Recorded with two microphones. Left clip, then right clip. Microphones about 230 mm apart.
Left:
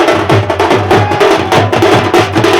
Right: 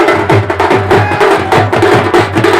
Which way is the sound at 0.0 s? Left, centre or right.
Left.